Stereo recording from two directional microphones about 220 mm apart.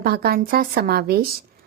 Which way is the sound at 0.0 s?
45° right (ahead or behind).